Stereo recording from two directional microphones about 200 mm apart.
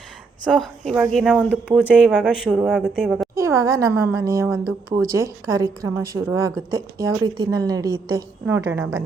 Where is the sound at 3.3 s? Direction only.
15° right (ahead or behind).